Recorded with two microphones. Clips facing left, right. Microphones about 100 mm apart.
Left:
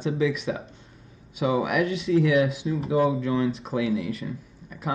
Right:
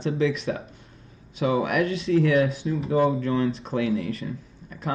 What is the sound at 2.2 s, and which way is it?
Speech, 35° right (ahead or behind).